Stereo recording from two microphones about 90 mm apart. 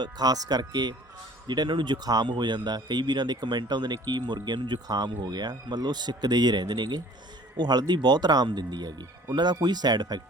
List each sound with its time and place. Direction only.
0.0 s speech: 45° right (ahead or behind)